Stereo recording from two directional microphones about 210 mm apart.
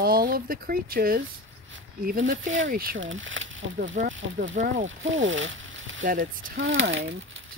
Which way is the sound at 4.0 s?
35° right (ahead or behind).